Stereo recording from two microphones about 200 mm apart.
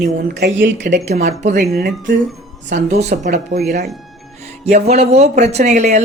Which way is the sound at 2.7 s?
35° right (ahead or behind).